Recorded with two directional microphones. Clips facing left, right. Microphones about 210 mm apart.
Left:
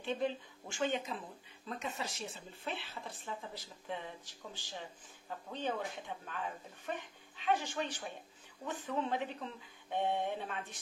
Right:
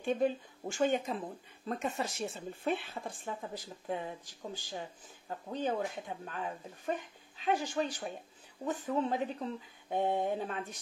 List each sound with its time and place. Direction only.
0.2 s speech: 45° right (ahead or behind)